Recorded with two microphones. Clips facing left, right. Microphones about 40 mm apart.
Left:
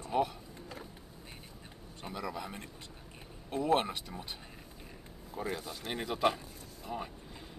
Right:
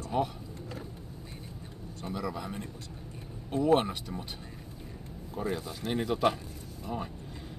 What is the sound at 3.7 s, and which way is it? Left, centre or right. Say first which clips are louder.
Speech: right 4 dB; centre.